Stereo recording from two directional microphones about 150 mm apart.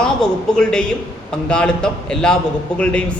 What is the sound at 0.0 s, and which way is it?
A man's voice, 5° left (ahead or behind).